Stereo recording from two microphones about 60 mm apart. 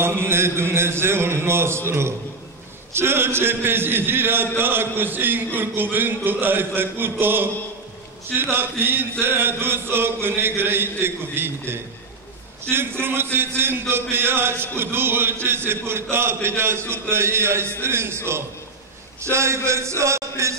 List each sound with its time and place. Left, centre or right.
0.3 s a man's voice: right